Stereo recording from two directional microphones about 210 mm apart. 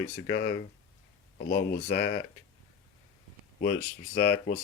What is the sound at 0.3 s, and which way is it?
Speech, 40° left (ahead or behind).